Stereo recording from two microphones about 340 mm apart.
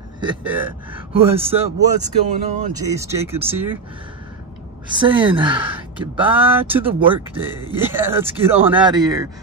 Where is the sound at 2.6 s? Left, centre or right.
Centre.